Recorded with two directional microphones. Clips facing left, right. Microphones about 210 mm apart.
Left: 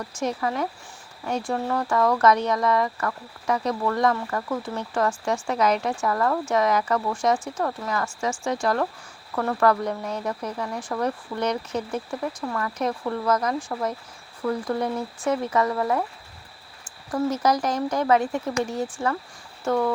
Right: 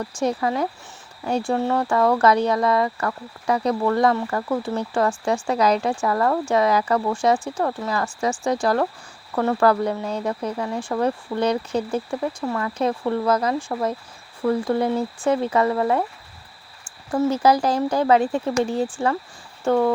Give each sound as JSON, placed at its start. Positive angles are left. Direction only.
{"t": 0.2, "sound": "speech", "side_deg": -35}
{"t": 17.1, "sound": "speech", "side_deg": -30}